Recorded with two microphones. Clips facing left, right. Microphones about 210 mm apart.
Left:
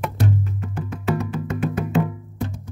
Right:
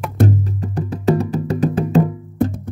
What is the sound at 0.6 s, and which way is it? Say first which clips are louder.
Music: right 6 dB; 35° right (ahead or behind).